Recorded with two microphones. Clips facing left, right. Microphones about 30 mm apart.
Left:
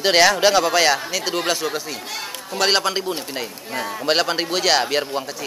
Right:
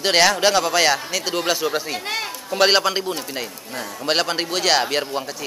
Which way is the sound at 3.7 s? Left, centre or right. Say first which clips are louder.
Left 5 dB; left.